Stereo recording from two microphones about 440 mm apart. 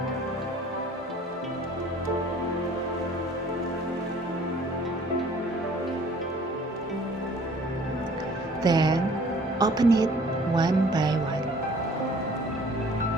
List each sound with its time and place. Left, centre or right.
8.6 s music: centre